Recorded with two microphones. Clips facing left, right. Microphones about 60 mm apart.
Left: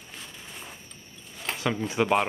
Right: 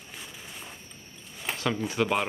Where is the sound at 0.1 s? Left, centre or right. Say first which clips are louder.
Even; centre.